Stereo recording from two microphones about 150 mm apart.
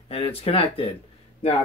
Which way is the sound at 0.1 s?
40° left (ahead or behind).